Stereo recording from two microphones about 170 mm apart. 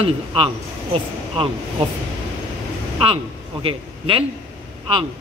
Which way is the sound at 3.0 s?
30° right (ahead or behind).